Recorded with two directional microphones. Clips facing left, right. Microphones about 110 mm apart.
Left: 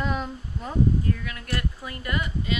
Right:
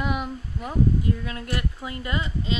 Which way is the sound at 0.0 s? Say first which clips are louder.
Right 1 dB; 10° right (ahead or behind).